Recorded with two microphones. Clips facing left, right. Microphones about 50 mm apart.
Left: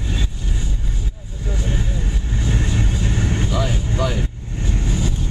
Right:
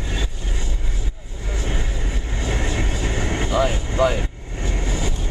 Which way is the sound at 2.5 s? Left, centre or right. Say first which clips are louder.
Left 1 dB; right.